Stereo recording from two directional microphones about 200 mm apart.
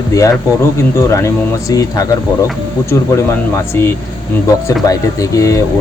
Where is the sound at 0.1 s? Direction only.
15° left (ahead or behind).